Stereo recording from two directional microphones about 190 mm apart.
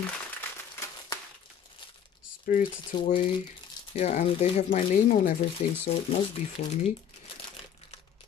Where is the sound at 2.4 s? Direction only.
45° left (ahead or behind).